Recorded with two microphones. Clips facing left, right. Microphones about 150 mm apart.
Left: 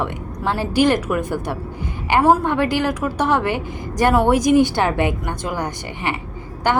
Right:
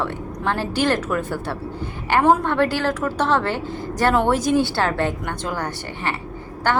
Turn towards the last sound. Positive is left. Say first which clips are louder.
# left 2 dB
turn(degrees=15)  # may be behind; listen again after turning